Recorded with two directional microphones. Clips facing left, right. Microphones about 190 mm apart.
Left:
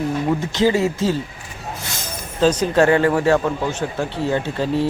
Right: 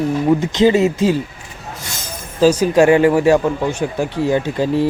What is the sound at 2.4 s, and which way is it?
Speech, 10° right (ahead or behind).